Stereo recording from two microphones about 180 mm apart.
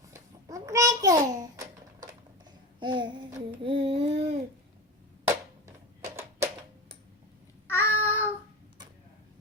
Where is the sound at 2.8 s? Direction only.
25° right (ahead or behind).